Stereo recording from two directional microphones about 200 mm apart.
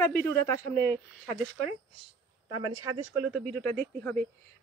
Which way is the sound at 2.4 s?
20° right (ahead or behind).